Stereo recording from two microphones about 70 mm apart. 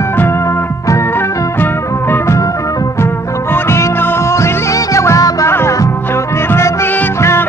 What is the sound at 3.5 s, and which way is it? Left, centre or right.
Music, left.